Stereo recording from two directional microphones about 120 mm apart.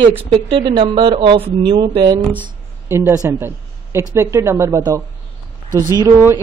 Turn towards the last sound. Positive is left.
turn(degrees=-20)  # may be behind; listen again after turning